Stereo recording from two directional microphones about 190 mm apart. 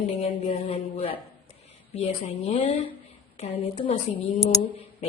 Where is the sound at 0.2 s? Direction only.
30° left (ahead or behind).